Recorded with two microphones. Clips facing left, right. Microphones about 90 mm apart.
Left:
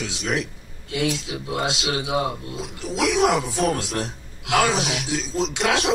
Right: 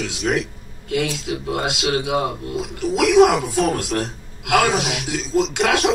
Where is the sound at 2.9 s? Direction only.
55° right (ahead or behind).